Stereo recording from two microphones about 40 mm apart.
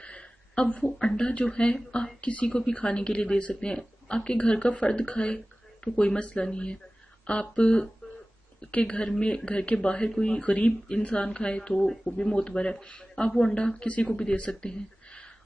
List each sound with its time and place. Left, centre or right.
0.0 s a sound: left
1.0 s speech: left
10.4 s speech: left
11.8 s a woman's voice: centre
13.8 s speech: left
14.5 s a sound: left